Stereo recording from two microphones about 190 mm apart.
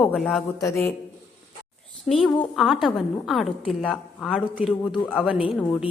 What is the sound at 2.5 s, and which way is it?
A woman's voice, centre (ahead or behind).